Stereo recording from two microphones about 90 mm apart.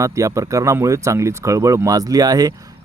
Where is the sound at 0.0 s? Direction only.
35° right (ahead or behind).